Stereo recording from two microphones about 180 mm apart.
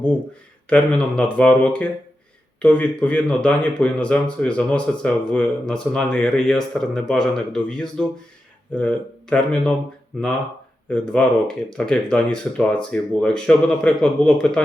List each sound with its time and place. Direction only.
0.7 s speech: 5° left (ahead or behind)
10.8 s speech: 5° left (ahead or behind)